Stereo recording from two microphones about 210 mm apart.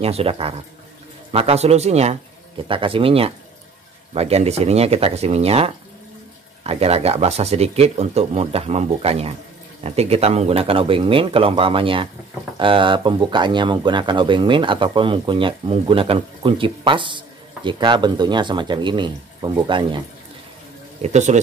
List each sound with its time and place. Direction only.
0.0 s speech: 30° right (ahead or behind)
21.0 s speech: 35° right (ahead or behind)